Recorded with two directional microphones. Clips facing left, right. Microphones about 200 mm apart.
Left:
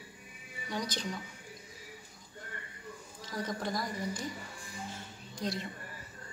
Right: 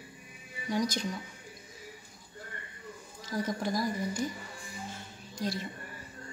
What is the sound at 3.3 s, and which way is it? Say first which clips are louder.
Speech: right 4 dB; 10° right (ahead or behind).